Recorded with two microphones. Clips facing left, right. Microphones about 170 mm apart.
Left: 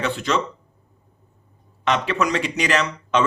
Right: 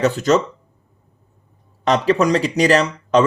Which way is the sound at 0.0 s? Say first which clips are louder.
Right 7 dB; 45° right (ahead or behind).